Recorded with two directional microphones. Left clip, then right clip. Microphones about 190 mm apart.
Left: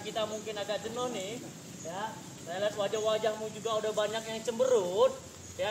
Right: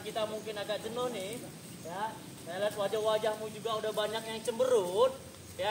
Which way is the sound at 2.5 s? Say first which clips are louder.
Left 1 dB; 10° right (ahead or behind).